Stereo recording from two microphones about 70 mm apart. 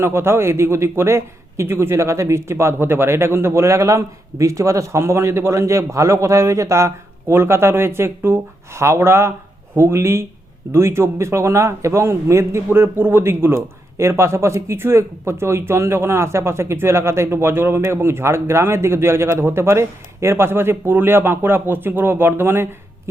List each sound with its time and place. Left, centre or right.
0.0 s a man's voice: right